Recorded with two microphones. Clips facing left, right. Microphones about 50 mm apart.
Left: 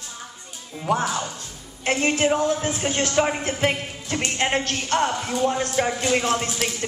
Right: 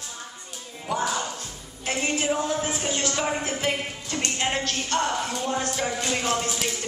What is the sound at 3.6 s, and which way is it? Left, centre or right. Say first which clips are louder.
Music: left 3 dB; left.